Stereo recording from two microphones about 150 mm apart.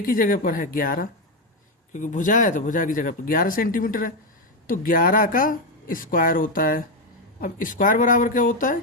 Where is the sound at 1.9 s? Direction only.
55° left (ahead or behind).